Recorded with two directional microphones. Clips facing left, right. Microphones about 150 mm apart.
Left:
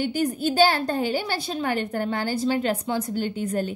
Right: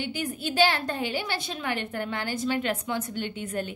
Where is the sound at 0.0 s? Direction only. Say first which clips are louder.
Left 7 dB; 40° left (ahead or behind).